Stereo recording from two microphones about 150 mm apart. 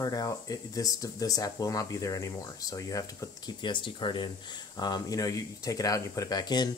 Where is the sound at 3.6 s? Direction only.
35° left (ahead or behind).